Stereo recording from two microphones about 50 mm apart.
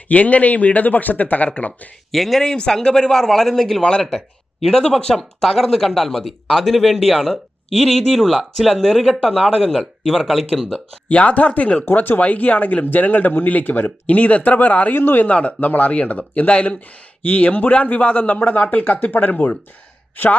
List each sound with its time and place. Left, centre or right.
0.1 s a man's voice: left
2.1 s speech: centre
2.4 s speech: centre
11.1 s speech: left
11.9 s a man's voice: left
14.9 s speech: left
15.3 s a man's voice: left